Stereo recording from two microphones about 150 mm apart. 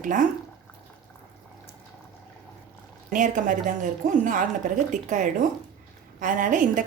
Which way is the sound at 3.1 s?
60° right (ahead or behind).